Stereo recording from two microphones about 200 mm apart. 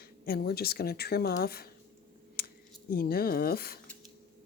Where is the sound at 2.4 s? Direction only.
50° left (ahead or behind).